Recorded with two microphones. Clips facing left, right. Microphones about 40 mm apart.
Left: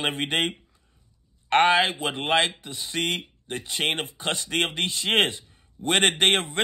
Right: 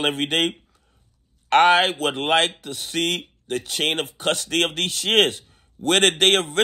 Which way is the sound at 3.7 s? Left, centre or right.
Centre.